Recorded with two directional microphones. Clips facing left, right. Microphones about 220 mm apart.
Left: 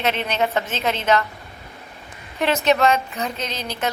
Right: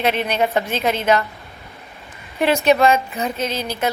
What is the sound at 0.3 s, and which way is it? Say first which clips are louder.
Speech: right 3 dB; 15° right (ahead or behind).